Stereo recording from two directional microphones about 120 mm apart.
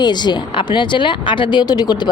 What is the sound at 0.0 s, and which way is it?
Speech, 35° left (ahead or behind).